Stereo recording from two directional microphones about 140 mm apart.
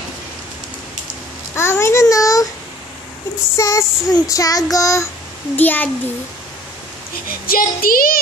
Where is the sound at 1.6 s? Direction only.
20° left (ahead or behind).